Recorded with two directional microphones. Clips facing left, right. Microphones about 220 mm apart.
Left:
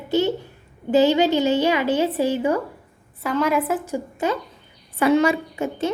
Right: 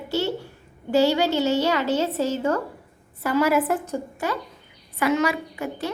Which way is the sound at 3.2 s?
5° right (ahead or behind).